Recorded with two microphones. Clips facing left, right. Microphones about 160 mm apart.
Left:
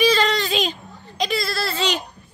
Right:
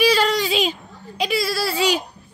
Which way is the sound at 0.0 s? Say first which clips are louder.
Right 1 dB; 10° right (ahead or behind).